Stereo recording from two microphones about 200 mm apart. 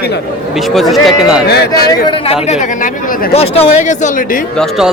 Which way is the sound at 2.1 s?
30° left (ahead or behind).